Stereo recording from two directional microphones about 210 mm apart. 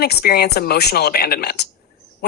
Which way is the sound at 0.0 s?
50° left (ahead or behind).